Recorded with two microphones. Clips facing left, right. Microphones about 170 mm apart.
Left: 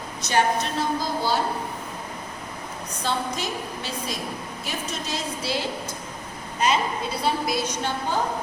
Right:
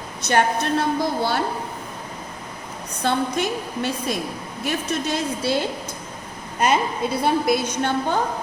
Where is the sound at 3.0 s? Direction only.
55° right (ahead or behind).